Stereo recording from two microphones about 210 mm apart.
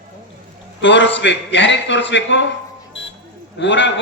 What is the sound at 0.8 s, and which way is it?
A man's voice, 60° left (ahead or behind).